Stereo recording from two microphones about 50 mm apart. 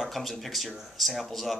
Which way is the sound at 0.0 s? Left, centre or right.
Centre.